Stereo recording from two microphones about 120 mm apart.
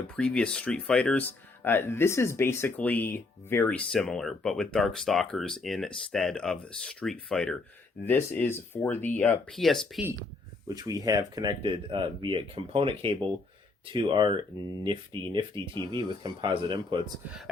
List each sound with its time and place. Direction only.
0.2 s speech: 10° left (ahead or behind)
1.3 s speech: 15° left (ahead or behind)
8.0 s speech: 20° left (ahead or behind)
9.5 s speech: centre (ahead or behind)
10.7 s speech: 30° right (ahead or behind)
11.6 s speech: 45° right (ahead or behind)
17.2 s speech: 5° right (ahead or behind)